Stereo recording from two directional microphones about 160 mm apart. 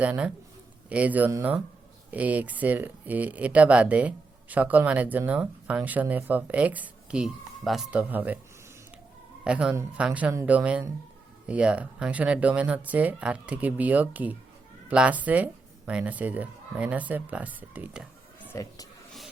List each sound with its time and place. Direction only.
0.0 s speech: 10° right (ahead or behind)
9.4 s speech: 5° right (ahead or behind)
18.5 s speech: 20° left (ahead or behind)